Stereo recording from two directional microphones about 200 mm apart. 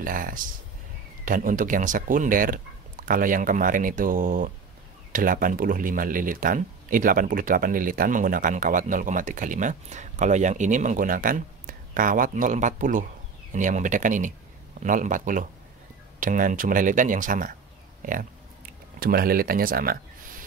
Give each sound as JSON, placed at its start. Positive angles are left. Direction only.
{"t": 0.0, "sound": "speech", "side_deg": -45}
{"t": 18.9, "sound": "speech", "side_deg": -50}